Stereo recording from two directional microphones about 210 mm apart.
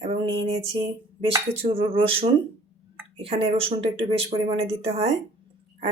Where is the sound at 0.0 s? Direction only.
25° right (ahead or behind).